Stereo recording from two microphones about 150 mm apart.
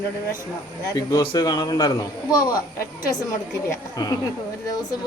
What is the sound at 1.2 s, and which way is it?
Speech, 30° left (ahead or behind).